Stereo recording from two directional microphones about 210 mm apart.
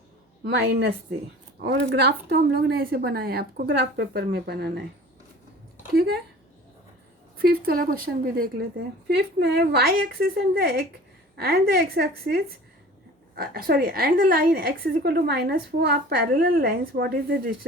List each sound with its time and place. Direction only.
0.4 s a woman's voice: 55° right (ahead or behind)
5.9 s a woman's voice: 50° right (ahead or behind)
7.4 s a woman's voice: 45° right (ahead or behind)